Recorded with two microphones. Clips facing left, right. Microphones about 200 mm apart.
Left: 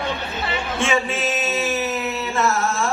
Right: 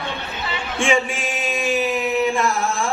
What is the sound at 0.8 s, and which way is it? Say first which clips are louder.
Male singing: right 2 dB; 15° right (ahead or behind).